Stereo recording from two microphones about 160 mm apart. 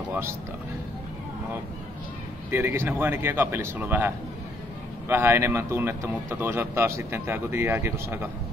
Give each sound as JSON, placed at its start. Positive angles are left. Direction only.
{"t": 0.1, "sound": "speech", "side_deg": -15}
{"t": 2.5, "sound": "speech", "side_deg": -15}